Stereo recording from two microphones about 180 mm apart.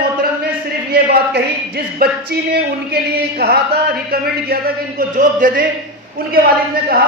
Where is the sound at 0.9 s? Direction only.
55° right (ahead or behind).